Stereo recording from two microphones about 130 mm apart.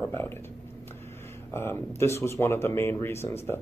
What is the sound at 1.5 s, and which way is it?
Speech, 20° left (ahead or behind).